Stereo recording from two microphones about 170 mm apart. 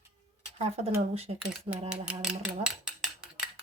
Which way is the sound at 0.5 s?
35° right (ahead or behind).